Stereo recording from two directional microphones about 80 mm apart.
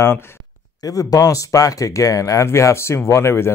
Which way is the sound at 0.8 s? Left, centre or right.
Left.